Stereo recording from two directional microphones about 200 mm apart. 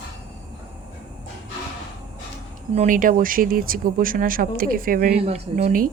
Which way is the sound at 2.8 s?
40° right (ahead or behind).